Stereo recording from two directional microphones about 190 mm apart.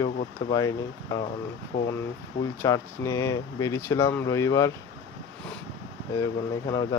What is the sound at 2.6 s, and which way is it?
Speech, 15° left (ahead or behind).